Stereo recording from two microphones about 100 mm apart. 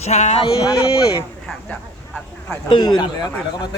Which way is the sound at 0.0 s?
90° left.